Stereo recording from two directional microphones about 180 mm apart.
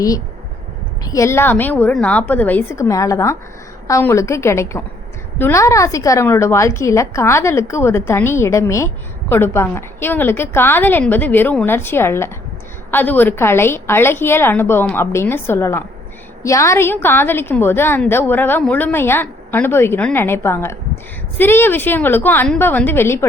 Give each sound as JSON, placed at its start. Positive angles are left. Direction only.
{"t": 1.0, "sound": "a woman's voice", "side_deg": 15}